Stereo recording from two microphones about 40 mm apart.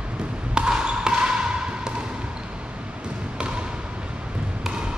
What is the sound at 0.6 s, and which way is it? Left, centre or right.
Basketball bounce, right.